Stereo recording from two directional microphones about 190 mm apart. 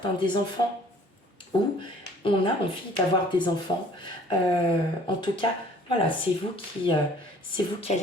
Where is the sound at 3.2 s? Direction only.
25° left (ahead or behind).